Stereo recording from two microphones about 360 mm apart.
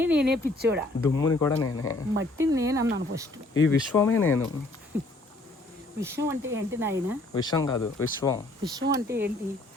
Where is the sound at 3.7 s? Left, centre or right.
Centre.